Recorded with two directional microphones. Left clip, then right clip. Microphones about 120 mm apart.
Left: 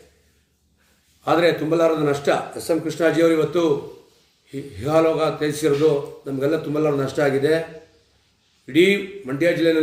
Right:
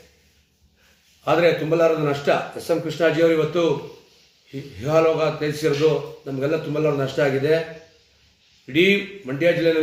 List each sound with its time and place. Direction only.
1.2 s a man's voice: 15° left (ahead or behind)
8.6 s a man's voice: 15° left (ahead or behind)